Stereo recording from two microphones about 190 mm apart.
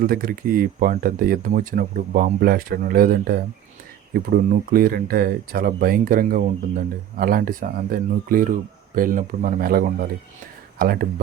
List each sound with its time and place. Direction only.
0.0 s speech: 50° right (ahead or behind)